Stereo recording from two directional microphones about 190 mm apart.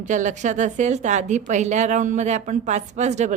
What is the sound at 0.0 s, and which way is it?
A woman's voice, 40° right (ahead or behind).